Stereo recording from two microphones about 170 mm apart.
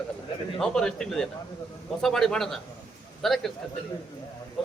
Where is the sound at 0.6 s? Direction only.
5° left (ahead or behind).